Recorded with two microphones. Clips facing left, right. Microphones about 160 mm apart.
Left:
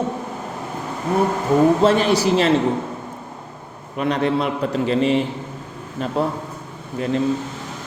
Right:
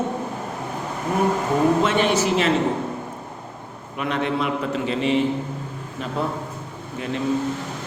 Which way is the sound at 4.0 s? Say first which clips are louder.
Left 4 dB; 35° left (ahead or behind).